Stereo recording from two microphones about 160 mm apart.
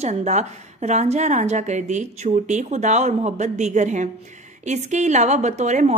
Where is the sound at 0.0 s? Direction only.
45° right (ahead or behind).